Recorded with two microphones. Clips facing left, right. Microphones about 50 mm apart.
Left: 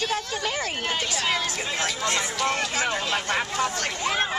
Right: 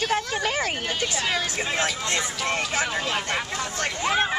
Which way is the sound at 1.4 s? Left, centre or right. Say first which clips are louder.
Right 2 dB; right.